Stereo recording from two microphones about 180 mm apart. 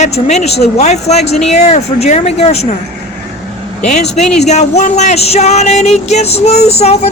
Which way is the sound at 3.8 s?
40° left (ahead or behind).